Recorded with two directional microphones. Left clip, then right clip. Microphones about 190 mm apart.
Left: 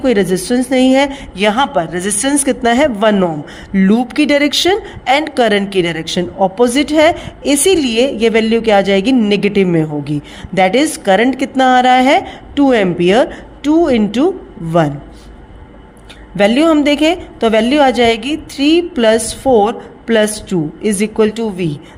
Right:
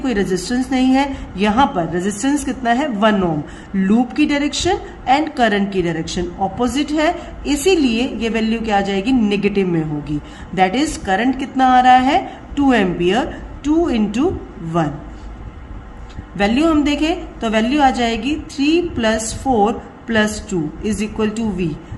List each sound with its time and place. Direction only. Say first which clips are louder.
0.0 s a woman's voice: left 6 dB; 40° left (ahead or behind)
16.4 s a woman's voice: left 5 dB; 45° left (ahead or behind)